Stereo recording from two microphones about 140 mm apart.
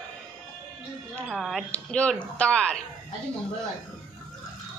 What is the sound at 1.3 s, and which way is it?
A woman's voice, centre (ahead or behind).